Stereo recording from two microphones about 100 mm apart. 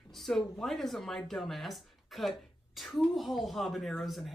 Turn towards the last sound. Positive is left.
turn(degrees=0)  # may be behind; listen again after turning